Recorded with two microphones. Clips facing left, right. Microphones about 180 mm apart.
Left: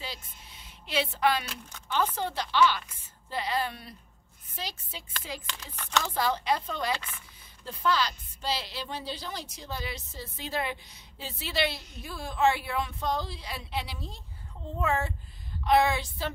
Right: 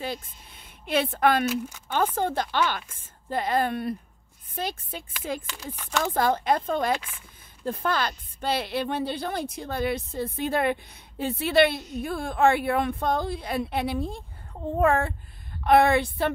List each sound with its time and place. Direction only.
0.0 s a woman's voice: 55° right (ahead or behind)
5.8 s speech: 10° right (ahead or behind)
6.0 s a woman's voice: 50° right (ahead or behind)
7.0 s speech: 10° right (ahead or behind)
7.6 s a woman's voice: 55° right (ahead or behind)